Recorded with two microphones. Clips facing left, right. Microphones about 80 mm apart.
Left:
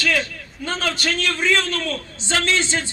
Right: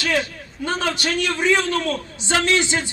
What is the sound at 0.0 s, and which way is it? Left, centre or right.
A man's voice, right.